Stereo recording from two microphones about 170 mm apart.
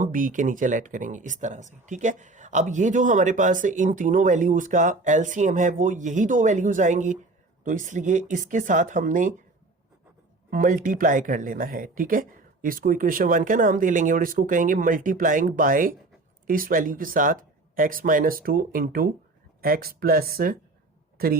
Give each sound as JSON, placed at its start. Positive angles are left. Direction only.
{"t": 0.0, "sound": "speech", "side_deg": -50}
{"t": 10.5, "sound": "speech", "side_deg": -50}